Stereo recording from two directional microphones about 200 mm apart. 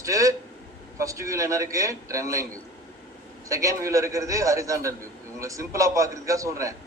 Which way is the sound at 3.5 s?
15° right (ahead or behind).